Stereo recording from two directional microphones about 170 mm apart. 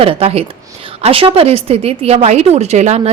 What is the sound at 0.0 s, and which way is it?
Speech, 35° right (ahead or behind).